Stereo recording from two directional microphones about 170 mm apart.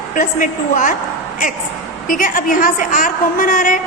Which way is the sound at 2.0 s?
50° left (ahead or behind).